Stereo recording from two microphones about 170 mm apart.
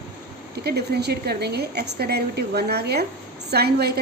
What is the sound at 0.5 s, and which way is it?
A woman's voice, 70° right (ahead or behind).